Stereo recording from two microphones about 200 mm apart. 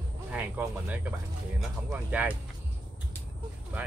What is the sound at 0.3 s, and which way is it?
Speech, 5° right (ahead or behind).